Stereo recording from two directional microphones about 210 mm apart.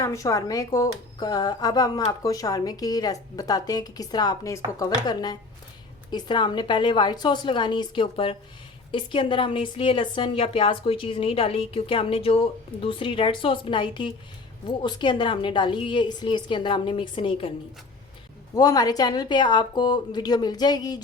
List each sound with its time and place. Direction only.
0.0 s a woman's voice: 15° left (ahead or behind)
18.5 s a woman's voice: 20° left (ahead or behind)